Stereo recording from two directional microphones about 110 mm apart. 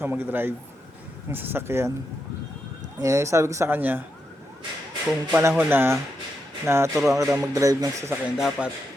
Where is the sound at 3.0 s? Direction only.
30° right (ahead or behind).